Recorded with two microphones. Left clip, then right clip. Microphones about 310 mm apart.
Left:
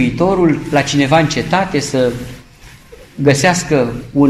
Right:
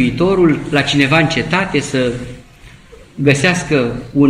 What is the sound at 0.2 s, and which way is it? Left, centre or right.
Speech, centre.